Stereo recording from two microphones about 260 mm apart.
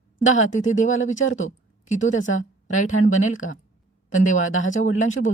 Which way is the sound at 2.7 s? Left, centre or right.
Left.